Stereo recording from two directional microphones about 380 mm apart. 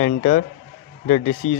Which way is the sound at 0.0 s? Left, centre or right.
Left.